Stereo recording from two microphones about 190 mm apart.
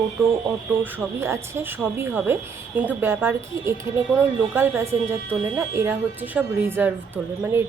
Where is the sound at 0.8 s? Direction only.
15° right (ahead or behind).